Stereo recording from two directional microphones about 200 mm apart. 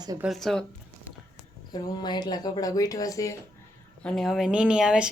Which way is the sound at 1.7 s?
20° left (ahead or behind).